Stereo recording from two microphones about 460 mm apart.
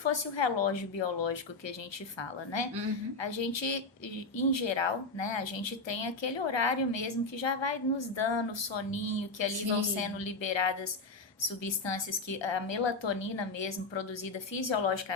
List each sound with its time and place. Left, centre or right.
0.1 s a woman's voice: left